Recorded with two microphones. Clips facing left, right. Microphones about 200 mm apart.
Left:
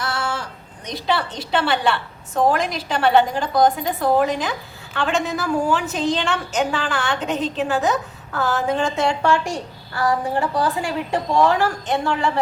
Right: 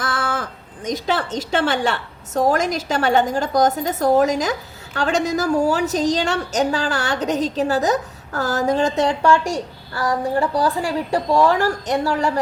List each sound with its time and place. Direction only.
0.0 s a sound: 50° right (ahead or behind)
0.9 s a woman's voice: 45° right (ahead or behind)
10.5 s a woman's voice: 35° right (ahead or behind)